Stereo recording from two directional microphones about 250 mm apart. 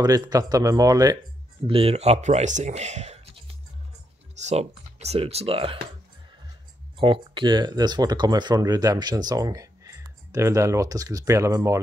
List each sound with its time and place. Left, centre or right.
0.0 s speech: centre
4.5 s speech: right
7.0 s speech: centre